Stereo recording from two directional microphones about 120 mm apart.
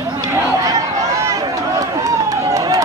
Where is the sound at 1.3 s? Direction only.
30° right (ahead or behind).